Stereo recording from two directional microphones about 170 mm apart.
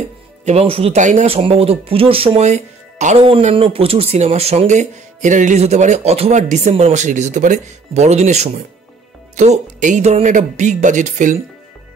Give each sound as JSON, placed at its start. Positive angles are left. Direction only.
{"t": 0.5, "sound": "a man's voice", "side_deg": -35}